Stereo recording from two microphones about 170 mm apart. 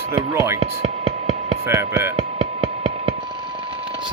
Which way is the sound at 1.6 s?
15° right (ahead or behind).